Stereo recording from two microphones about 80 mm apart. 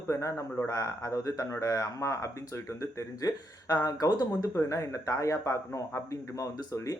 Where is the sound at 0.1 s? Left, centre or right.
Left.